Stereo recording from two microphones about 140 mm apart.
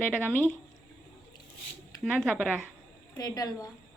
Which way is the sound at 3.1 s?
25° left (ahead or behind).